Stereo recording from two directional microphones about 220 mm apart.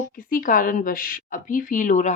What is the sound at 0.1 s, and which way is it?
A woman's voice, 40° left (ahead or behind).